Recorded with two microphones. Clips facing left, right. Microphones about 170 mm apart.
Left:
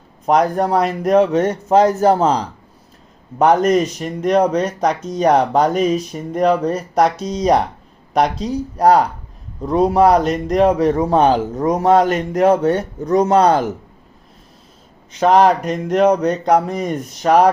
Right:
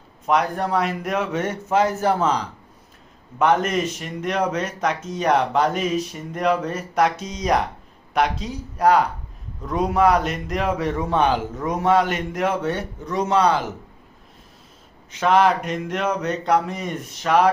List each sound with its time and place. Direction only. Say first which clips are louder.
0.3 s speech: left 6 dB; 40° left (ahead or behind)
15.1 s speech: left 5 dB; 35° left (ahead or behind)